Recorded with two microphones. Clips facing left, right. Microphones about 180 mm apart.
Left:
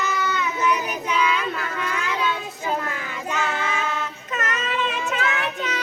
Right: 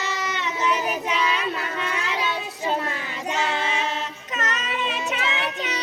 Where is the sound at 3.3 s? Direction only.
25° right (ahead or behind).